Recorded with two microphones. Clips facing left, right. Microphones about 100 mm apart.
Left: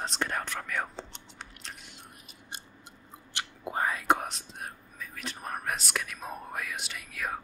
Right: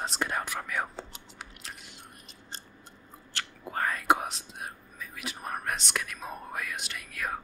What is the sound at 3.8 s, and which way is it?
Speech, 5° left (ahead or behind).